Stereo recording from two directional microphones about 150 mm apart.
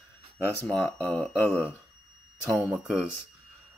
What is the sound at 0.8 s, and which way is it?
Speech, centre (ahead or behind).